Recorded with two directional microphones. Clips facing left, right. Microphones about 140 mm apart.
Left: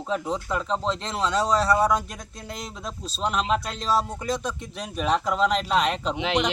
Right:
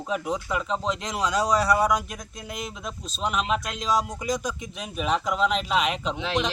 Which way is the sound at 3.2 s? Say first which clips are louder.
Left 1 dB; 5° right (ahead or behind).